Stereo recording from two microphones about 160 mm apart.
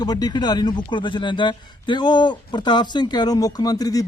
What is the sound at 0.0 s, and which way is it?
A man's voice, 25° left (ahead or behind).